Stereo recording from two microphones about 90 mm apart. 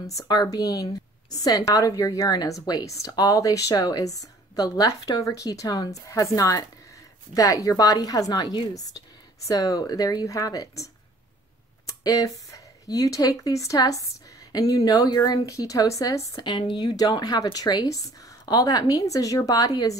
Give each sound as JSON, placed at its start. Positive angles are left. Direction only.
{"t": 0.0, "sound": "a woman's voice", "side_deg": 40}
{"t": 16.4, "sound": "a woman's voice", "side_deg": 55}